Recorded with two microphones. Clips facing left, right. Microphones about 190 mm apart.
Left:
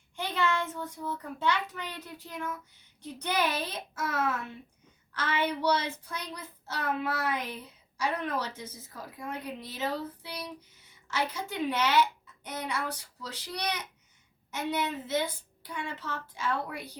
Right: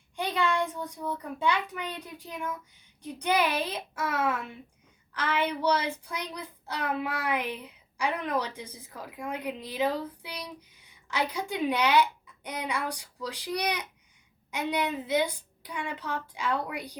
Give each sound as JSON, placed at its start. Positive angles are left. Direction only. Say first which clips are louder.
{"t": 0.2, "sound": "a child's voice", "louder": "right 2 dB", "side_deg": -15}